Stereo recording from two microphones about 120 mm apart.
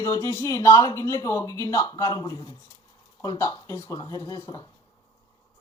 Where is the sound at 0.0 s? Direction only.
25° left (ahead or behind).